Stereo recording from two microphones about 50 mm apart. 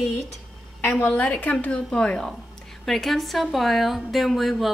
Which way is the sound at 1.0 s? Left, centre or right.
Left.